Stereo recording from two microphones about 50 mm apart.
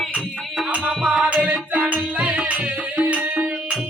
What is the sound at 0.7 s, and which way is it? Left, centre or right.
Music, right.